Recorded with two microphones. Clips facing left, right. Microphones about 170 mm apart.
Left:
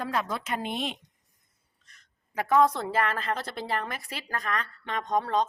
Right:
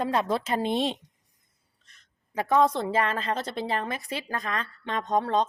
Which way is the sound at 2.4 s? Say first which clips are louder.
Even; 25° right (ahead or behind).